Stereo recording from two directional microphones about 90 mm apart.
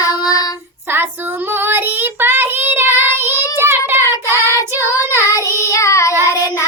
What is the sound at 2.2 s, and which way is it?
Child singing, 25° right (ahead or behind).